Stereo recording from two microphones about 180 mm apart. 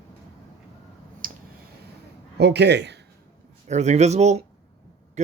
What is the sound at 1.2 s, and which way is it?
Clicking, 50° right (ahead or behind).